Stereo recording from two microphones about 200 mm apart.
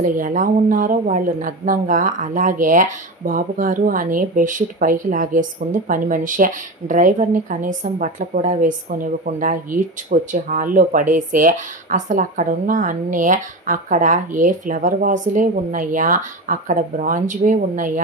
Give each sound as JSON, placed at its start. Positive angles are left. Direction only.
{"t": 0.0, "sound": "speech", "side_deg": -40}